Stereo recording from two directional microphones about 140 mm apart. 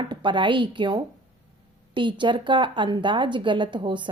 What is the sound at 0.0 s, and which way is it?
A woman's voice, 35° right (ahead or behind).